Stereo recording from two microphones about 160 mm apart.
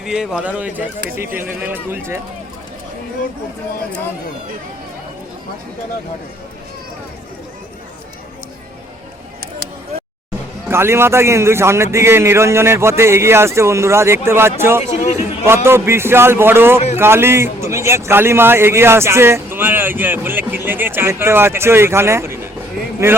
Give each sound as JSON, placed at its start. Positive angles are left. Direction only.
{"t": 0.0, "sound": "a man's voice", "side_deg": -5}
{"t": 10.7, "sound": "a man's voice", "side_deg": -15}
{"t": 14.8, "sound": "a man's voice", "side_deg": 45}
{"t": 15.4, "sound": "a man's voice", "side_deg": -15}